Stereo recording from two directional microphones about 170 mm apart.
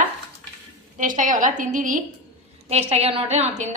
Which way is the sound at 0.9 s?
50° right (ahead or behind).